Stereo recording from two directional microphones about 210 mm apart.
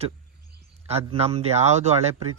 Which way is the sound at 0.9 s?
30° right (ahead or behind).